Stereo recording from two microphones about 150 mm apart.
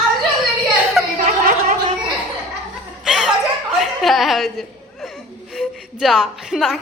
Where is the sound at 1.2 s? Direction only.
65° right (ahead or behind).